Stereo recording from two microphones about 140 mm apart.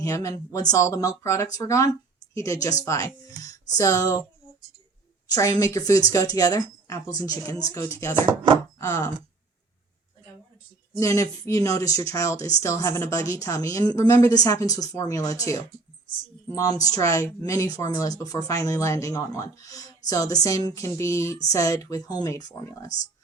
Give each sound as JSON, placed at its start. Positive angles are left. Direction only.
{"t": 0.0, "sound": "speech", "side_deg": 20}
{"t": 5.3, "sound": "speech", "side_deg": 25}
{"t": 11.0, "sound": "speech", "side_deg": 25}